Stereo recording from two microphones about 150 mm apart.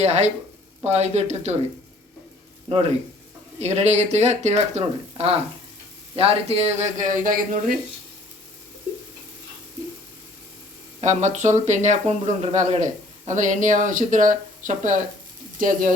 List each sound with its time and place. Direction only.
0.0 s speech: 45° right (ahead or behind)
2.6 s speech: 40° right (ahead or behind); by 7.8 s 65° right (ahead or behind)
11.0 s speech: 55° right (ahead or behind)